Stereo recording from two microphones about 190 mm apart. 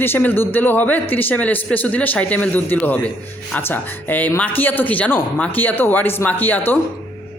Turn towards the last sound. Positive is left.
turn(degrees=10)  # may be behind; listen again after turning